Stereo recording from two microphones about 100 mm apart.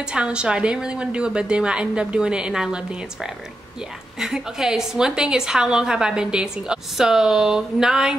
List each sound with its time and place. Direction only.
0.0 s a woman's voice: 10° right (ahead or behind)